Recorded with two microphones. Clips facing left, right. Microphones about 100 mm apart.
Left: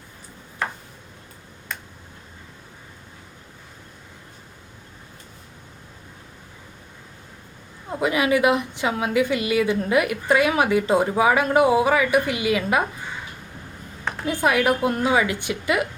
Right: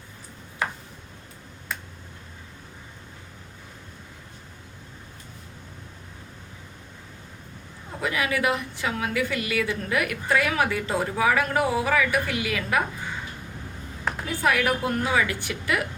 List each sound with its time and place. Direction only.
8.0 s a woman's voice: 20° left (ahead or behind)
14.3 s a woman's voice: 20° left (ahead or behind)